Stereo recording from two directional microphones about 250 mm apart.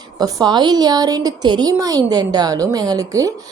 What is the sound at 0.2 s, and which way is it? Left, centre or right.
A woman's voice, centre.